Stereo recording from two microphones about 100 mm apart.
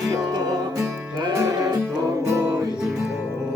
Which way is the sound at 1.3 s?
30° right (ahead or behind).